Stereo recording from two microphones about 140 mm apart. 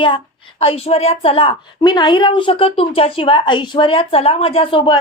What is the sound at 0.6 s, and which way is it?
A woman's voice, 45° left (ahead or behind).